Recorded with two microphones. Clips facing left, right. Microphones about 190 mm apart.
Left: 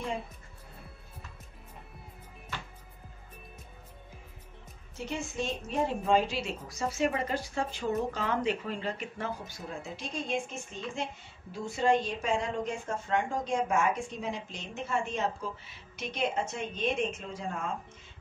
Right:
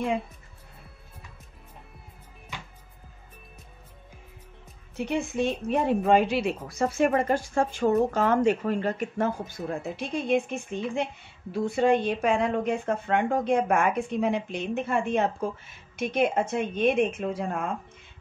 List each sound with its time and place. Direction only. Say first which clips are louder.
2.5 s music: even; 15° right (ahead or behind)
4.9 s a woman's voice: right 8 dB; 60° right (ahead or behind)